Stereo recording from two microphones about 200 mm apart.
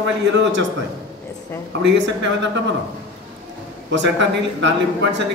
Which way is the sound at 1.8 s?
65° right (ahead or behind).